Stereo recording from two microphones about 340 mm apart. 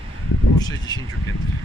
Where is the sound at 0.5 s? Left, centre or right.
Centre.